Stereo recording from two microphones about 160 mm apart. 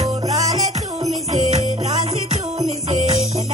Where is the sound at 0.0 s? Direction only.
40° right (ahead or behind).